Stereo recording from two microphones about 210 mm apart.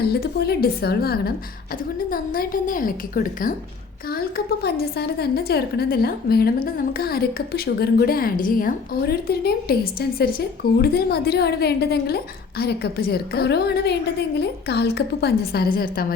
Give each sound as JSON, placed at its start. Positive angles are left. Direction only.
{"t": 0.1, "sound": "a woman's voice", "side_deg": 50}